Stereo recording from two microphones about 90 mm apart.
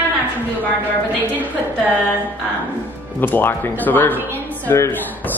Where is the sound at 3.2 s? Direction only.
25° left (ahead or behind).